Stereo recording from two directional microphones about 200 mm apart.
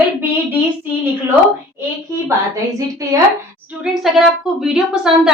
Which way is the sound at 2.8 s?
15° right (ahead or behind).